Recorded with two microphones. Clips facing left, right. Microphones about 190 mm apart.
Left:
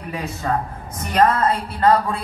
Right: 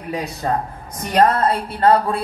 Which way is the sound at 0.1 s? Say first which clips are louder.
Right 2 dB; 35° right (ahead or behind).